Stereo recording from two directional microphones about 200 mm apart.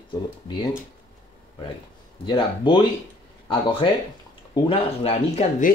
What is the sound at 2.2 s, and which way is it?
Speech, 25° left (ahead or behind).